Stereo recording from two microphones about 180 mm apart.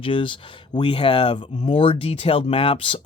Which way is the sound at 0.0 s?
30° left (ahead or behind).